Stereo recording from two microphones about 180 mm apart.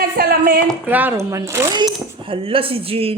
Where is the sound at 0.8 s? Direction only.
10° right (ahead or behind).